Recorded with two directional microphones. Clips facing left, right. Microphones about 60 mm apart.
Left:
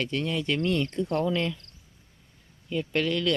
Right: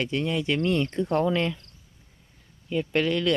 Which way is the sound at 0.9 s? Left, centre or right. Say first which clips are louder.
Right 3 dB; right.